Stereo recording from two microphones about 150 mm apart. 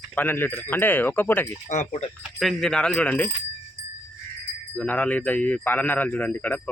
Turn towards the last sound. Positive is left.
turn(degrees=10)  # may be behind; listen again after turning